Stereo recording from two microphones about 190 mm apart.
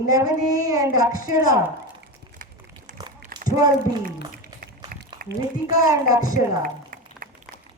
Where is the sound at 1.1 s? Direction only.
45° left (ahead or behind).